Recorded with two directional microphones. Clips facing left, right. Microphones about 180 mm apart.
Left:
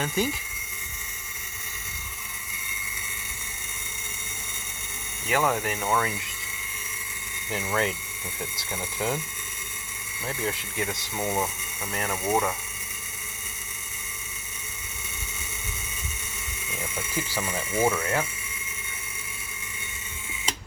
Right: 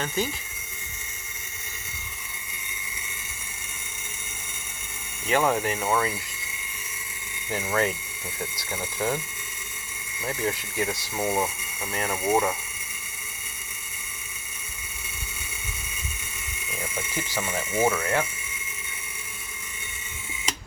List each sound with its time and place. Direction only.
5.4 s speech: 10° right (ahead or behind)
7.5 s speech: 10° right (ahead or behind)
10.2 s speech: 10° right (ahead or behind)
17.3 s speech: 15° right (ahead or behind)
17.9 s speech: 5° left (ahead or behind)